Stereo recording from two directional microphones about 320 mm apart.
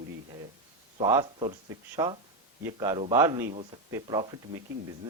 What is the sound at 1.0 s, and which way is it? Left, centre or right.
Speech, centre.